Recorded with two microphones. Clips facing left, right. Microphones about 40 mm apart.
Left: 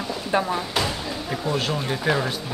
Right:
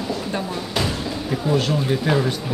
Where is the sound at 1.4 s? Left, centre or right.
Centre.